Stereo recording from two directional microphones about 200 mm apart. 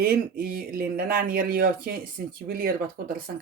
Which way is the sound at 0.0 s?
45° right (ahead or behind).